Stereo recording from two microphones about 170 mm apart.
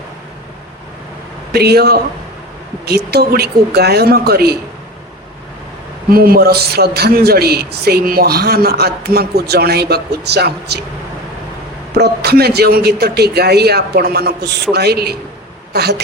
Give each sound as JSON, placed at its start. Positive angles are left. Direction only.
{"t": 1.5, "sound": "speech", "side_deg": -70}
{"t": 6.1, "sound": "speech", "side_deg": -60}
{"t": 11.9, "sound": "speech", "side_deg": -70}